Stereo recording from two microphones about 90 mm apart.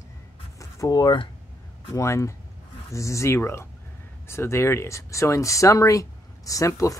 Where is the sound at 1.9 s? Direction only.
35° left (ahead or behind).